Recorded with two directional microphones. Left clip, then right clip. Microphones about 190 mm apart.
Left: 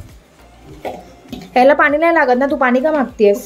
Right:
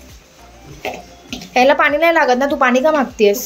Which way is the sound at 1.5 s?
30° left (ahead or behind).